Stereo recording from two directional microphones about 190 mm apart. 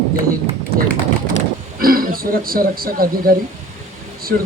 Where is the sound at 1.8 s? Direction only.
50° right (ahead or behind).